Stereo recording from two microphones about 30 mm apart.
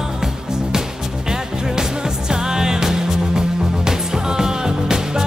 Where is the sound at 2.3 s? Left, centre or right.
Right.